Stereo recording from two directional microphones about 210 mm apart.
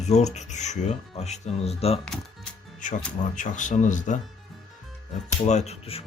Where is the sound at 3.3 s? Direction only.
35° left (ahead or behind).